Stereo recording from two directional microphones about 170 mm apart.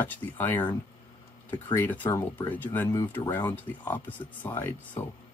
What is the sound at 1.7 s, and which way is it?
Speech, 10° left (ahead or behind).